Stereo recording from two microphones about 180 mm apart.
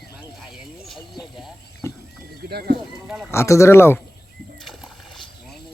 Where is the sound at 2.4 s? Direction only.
60° right (ahead or behind).